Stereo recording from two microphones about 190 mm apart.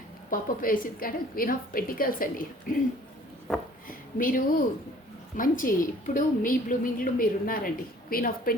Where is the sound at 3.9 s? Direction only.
45° left (ahead or behind).